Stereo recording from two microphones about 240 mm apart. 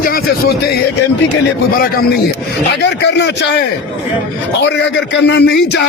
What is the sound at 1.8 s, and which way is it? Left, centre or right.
A man's voice, left.